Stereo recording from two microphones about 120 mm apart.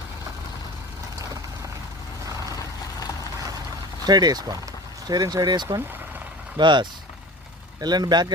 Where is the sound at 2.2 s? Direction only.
30° right (ahead or behind).